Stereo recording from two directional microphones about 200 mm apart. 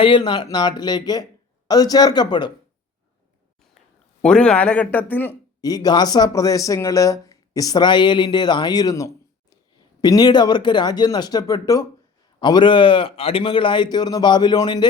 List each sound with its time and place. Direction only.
0.0 s speech: 25° left (ahead or behind)
4.2 s speech: 5° left (ahead or behind)
5.6 s speech: 20° left (ahead or behind)